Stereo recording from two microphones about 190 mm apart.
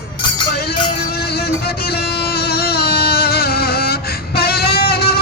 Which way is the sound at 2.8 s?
55° left (ahead or behind).